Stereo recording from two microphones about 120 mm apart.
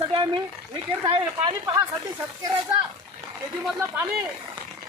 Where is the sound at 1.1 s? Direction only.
40° right (ahead or behind).